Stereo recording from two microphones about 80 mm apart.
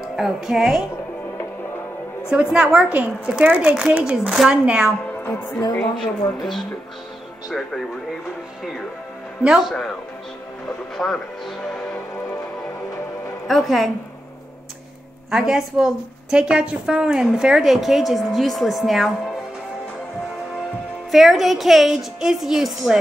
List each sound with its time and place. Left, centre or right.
0.0 s speech: centre
2.3 s speech: centre
5.8 s a woman's voice: centre
9.4 s speech: centre
11.0 s a woman's voice: centre
13.5 s a woman's voice: centre
15.3 s a woman's voice: centre
21.1 s a woman's voice: centre